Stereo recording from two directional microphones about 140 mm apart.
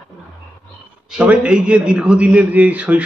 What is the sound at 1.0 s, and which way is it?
A man's voice, 5° right (ahead or behind).